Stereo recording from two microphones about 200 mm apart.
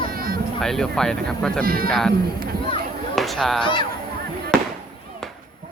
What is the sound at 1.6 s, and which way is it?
Speech, 45° right (ahead or behind).